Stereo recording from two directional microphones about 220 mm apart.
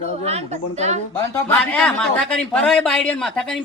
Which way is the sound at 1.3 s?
10° left (ahead or behind).